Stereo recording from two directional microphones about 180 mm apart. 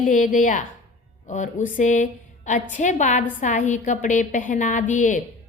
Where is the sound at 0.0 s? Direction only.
45° left (ahead or behind).